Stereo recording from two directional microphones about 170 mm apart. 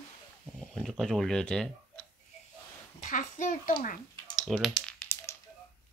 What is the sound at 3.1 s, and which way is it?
Speech, 50° left (ahead or behind).